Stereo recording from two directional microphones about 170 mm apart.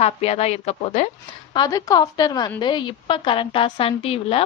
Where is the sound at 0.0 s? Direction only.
40° left (ahead or behind).